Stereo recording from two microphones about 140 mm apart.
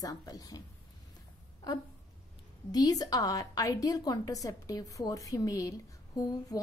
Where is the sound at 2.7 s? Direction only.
25° left (ahead or behind).